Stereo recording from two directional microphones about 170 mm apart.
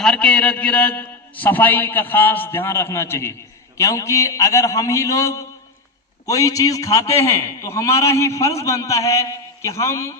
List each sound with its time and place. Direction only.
0.0 s a man's voice: 5° left (ahead or behind)